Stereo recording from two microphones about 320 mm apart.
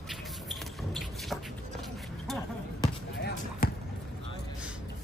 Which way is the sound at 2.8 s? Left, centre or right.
Centre.